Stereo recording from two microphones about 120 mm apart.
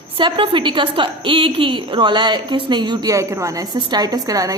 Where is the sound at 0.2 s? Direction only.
45° right (ahead or behind).